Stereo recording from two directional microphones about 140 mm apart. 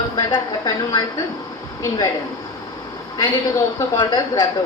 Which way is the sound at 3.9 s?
30° left (ahead or behind).